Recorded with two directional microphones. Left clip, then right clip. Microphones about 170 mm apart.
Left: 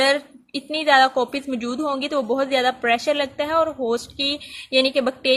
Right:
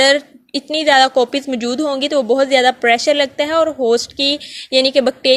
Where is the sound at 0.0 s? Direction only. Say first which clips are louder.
Right 6 dB; 30° right (ahead or behind).